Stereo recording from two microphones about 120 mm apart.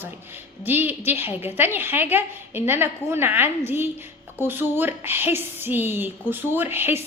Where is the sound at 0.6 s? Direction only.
15° right (ahead or behind).